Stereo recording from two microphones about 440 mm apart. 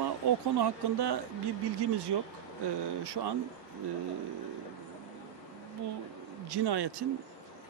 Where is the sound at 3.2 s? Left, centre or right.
Right.